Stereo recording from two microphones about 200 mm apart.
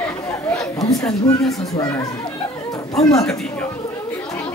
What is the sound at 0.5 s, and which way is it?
Chatter, 15° left (ahead or behind).